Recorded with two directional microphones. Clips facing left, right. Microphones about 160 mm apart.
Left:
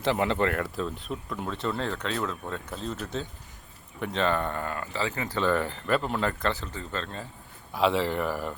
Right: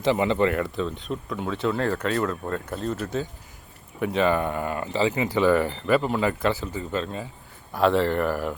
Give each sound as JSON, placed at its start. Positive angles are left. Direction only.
{"t": 0.0, "sound": "speech", "side_deg": 0}
{"t": 7.7, "sound": "speech", "side_deg": 0}